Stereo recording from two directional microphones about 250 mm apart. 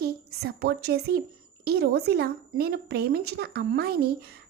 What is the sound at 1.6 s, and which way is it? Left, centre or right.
A woman's voice, right.